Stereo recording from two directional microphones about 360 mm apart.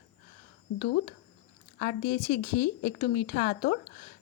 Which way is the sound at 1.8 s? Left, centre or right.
Left.